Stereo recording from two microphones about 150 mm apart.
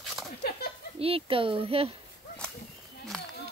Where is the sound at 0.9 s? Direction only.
40° right (ahead or behind).